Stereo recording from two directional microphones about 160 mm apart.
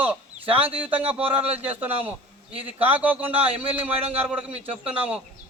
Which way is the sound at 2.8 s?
10° right (ahead or behind).